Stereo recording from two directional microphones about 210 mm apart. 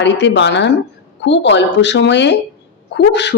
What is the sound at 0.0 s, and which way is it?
Speech, 55° left (ahead or behind).